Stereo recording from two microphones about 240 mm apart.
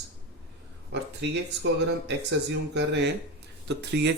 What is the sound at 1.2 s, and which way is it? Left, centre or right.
Speech, right.